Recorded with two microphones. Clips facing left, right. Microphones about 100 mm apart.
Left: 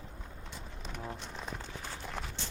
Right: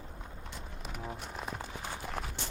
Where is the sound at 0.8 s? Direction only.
5° right (ahead or behind).